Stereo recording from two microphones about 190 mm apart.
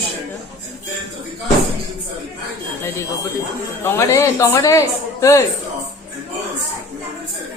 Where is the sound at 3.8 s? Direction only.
15° left (ahead or behind).